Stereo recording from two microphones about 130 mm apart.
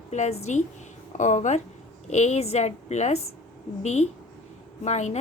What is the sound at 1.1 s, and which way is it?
A woman's voice, 70° left (ahead or behind).